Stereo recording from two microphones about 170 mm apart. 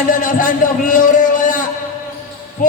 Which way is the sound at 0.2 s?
55° left (ahead or behind).